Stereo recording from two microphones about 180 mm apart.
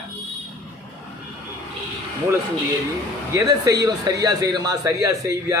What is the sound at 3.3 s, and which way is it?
A man's voice, 20° right (ahead or behind).